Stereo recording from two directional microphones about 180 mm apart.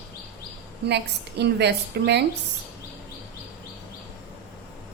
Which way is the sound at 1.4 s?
70° right (ahead or behind).